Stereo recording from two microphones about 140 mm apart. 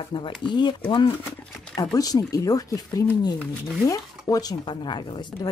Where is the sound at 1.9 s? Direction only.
25° left (ahead or behind).